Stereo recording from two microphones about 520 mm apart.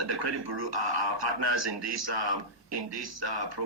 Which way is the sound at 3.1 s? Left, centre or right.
Right.